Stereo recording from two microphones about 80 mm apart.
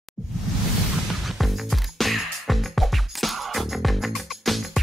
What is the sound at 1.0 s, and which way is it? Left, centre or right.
Music, centre.